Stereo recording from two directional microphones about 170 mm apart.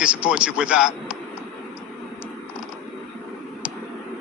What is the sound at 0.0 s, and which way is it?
Speech, 5° right (ahead or behind).